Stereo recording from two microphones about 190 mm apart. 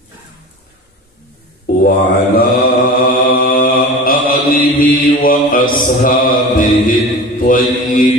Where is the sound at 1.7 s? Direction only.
55° left (ahead or behind).